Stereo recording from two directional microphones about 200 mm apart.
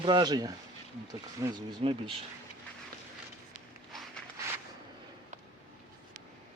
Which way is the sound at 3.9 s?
Centre (ahead or behind).